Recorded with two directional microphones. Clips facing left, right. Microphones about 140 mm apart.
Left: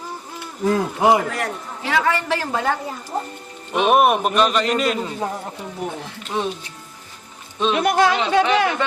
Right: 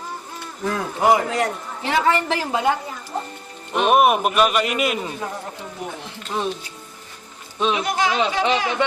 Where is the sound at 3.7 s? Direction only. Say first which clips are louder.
Even; centre (ahead or behind).